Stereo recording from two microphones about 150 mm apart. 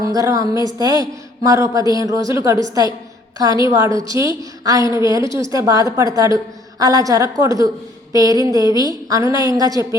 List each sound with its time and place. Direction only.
0.0 s a woman's voice: 25° right (ahead or behind)